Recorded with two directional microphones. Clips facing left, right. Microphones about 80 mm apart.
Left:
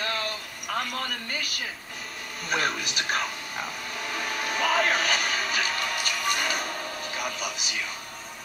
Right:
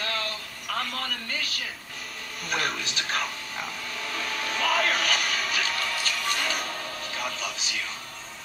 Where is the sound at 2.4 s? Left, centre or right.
Left.